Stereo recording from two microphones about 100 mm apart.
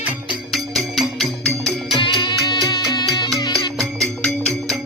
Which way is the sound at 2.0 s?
50° left (ahead or behind).